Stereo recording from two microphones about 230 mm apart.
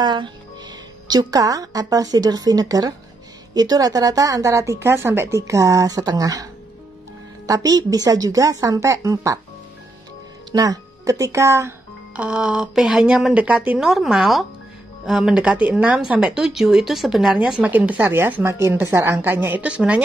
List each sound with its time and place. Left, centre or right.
0.0 s a woman's voice: centre
10.5 s speech: centre